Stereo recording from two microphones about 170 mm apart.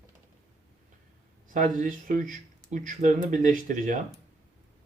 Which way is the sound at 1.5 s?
50° right (ahead or behind).